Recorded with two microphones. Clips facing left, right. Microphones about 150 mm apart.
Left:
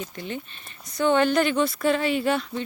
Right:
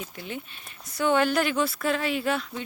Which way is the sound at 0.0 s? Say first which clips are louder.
Left 3 dB; 5° right (ahead or behind).